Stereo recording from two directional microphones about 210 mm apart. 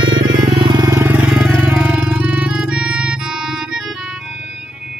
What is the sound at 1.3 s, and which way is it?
Music, centre (ahead or behind).